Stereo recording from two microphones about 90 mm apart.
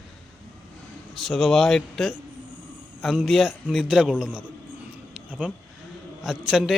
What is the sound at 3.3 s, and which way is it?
A man's voice, centre (ahead or behind).